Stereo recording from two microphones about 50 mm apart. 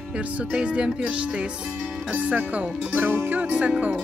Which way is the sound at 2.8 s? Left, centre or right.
Right.